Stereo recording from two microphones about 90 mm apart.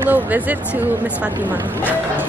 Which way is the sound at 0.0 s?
20° right (ahead or behind).